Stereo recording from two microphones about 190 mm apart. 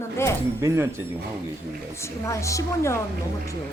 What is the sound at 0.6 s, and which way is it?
Speech, 15° right (ahead or behind).